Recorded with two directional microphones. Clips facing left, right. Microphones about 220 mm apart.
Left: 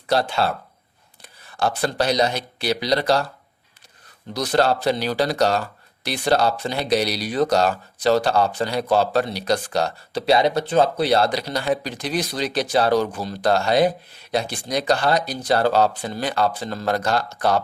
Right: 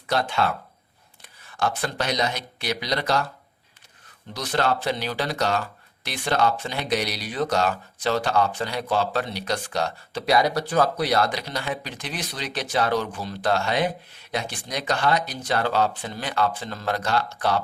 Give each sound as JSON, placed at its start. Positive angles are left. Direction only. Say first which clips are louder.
{"t": 0.1, "sound": "speech", "louder": "left 3 dB", "side_deg": 35}
{"t": 4.4, "sound": "speech", "louder": "left 5 dB", "side_deg": 35}